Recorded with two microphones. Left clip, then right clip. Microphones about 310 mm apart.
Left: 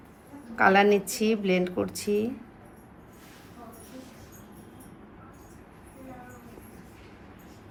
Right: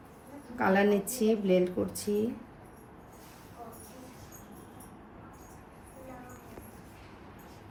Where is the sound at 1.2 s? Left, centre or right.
Left.